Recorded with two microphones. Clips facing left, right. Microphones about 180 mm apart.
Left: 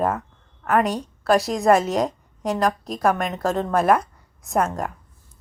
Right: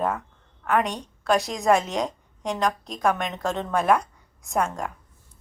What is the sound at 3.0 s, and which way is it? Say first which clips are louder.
Speech: left 3 dB; centre (ahead or behind).